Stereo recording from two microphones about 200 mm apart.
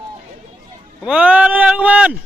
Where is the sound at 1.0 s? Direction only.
5° right (ahead or behind).